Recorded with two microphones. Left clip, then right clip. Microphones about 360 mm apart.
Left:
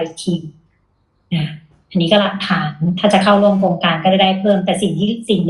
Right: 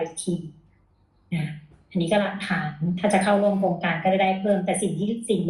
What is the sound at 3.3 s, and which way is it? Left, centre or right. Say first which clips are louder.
Speech: left 8 dB; left.